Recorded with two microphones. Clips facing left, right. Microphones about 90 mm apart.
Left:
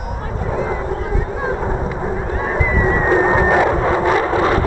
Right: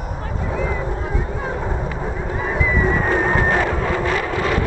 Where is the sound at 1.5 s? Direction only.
15° left (ahead or behind).